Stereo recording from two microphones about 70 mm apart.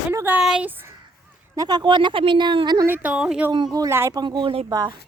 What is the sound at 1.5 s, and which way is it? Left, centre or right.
Speech, right.